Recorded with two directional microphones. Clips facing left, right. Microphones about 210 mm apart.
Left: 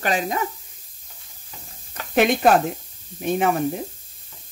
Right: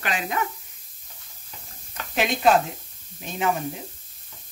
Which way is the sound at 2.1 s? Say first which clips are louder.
Left 4 dB; 55° left (ahead or behind).